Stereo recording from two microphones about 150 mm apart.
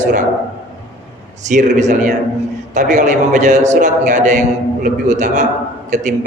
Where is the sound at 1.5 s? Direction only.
55° right (ahead or behind).